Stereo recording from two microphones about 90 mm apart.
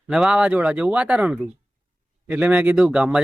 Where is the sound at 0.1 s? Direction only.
10° right (ahead or behind).